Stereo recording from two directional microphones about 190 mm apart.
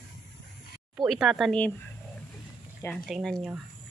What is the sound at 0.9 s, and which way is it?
Speech, centre (ahead or behind).